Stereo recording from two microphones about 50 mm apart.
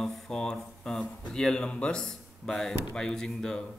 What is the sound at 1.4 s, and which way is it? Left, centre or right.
Speech, centre.